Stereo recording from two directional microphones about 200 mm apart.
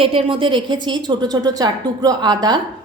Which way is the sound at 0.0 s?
25° right (ahead or behind).